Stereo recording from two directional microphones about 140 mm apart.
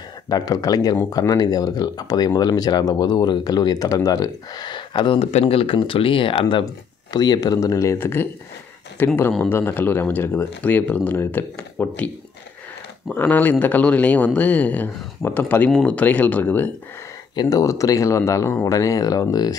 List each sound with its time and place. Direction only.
0.3 s speech: 25° left (ahead or behind)
13.1 s speech: 10° left (ahead or behind)
17.4 s speech: 25° left (ahead or behind)